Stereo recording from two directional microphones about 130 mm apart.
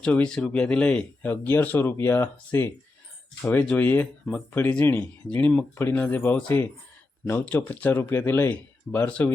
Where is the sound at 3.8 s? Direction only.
15° left (ahead or behind).